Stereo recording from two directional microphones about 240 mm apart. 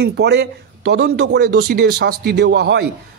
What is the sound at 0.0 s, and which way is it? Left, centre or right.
A man's voice, right.